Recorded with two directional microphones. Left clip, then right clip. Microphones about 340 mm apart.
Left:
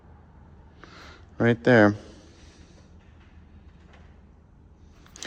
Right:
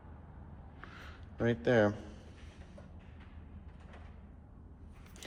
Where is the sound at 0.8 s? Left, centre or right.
Centre.